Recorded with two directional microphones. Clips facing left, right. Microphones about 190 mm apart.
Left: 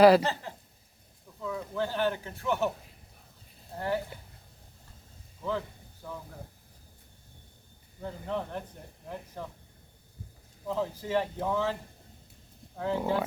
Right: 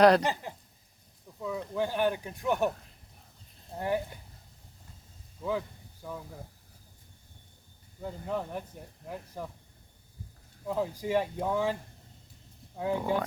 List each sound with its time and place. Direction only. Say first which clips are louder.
0.2 s speech: right 1 dB; 15° right (ahead or behind)
3.8 s speech: right 1 dB; 15° right (ahead or behind)
5.5 s speech: right 1 dB; 10° right (ahead or behind)
8.0 s speech: even; 5° right (ahead or behind)
10.7 s speech: right 1 dB; 15° right (ahead or behind)